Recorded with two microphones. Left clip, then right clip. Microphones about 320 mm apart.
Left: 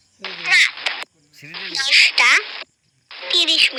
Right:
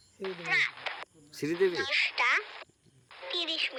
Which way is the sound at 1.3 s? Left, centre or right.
Centre.